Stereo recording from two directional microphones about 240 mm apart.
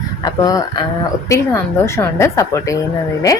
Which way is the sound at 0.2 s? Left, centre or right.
Centre.